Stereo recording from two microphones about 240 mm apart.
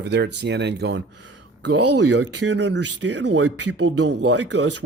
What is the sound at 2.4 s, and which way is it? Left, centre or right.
Speech, right.